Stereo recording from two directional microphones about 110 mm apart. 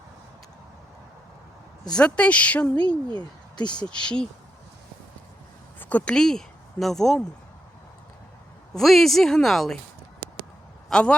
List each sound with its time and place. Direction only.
1.9 s a woman's voice: 10° left (ahead or behind)
3.2 s speech: 40° left (ahead or behind)
3.8 s a woman's voice: 10° left (ahead or behind)
5.8 s speech: 10° left (ahead or behind)
8.7 s speech: centre (ahead or behind)
10.8 s a man's voice: 5° left (ahead or behind)